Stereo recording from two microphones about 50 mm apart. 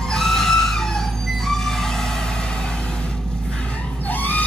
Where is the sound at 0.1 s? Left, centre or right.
Centre.